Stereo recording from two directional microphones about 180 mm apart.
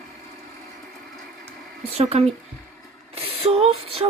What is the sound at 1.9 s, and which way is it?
Speech, 35° right (ahead or behind).